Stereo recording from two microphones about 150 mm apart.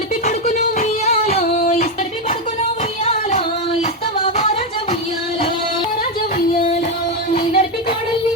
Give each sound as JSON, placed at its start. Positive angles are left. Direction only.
{"t": 0.3, "sound": "music", "side_deg": 50}
{"t": 1.5, "sound": "a sound", "side_deg": 50}
{"t": 3.0, "sound": "music", "side_deg": 45}
{"t": 7.3, "sound": "music", "side_deg": 40}